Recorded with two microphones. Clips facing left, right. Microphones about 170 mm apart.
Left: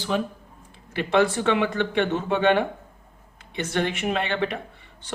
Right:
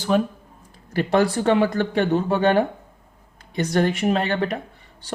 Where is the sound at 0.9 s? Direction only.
40° right (ahead or behind).